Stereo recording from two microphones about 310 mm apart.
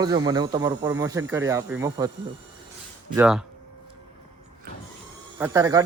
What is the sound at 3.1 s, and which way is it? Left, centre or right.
Speech, centre.